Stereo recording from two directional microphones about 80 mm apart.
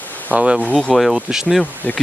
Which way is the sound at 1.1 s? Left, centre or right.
Centre.